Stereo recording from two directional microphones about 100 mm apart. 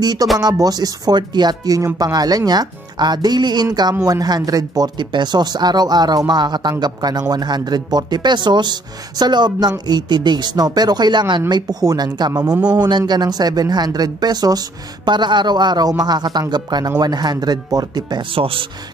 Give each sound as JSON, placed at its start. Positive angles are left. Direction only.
{"t": 0.0, "sound": "speech", "side_deg": -45}
{"t": 18.4, "sound": "speech", "side_deg": -65}